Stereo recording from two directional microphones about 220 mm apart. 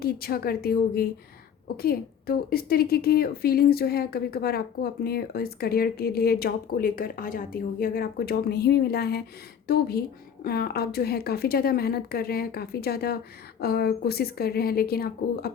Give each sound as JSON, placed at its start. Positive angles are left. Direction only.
{"t": 0.0, "sound": "a woman's voice", "side_deg": 45}